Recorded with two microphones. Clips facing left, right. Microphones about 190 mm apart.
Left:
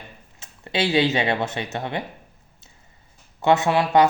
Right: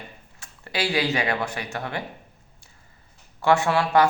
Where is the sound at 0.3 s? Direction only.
20° left (ahead or behind).